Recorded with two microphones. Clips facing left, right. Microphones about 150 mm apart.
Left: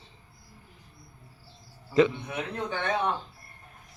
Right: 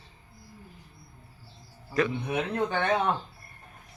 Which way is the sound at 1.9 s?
20° left (ahead or behind).